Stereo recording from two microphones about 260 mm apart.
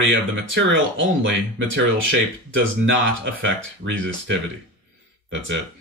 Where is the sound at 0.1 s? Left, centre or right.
Right.